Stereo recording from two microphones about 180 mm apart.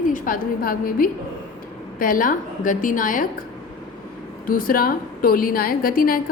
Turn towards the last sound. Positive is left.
turn(degrees=55)  # may be behind; listen again after turning